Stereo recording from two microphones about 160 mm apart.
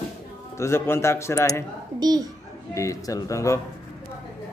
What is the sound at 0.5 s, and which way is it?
A man's voice, 15° left (ahead or behind).